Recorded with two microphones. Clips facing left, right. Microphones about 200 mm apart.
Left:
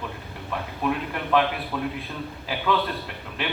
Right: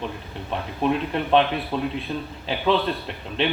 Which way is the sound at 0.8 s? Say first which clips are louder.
Right 5 dB; 25° right (ahead or behind).